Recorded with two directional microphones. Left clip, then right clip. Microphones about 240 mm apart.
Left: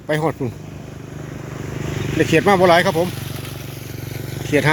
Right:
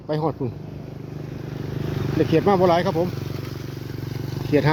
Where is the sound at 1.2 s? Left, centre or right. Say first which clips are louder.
Left 3 dB; centre.